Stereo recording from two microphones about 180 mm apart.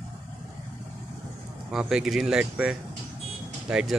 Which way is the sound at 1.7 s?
Centre (ahead or behind).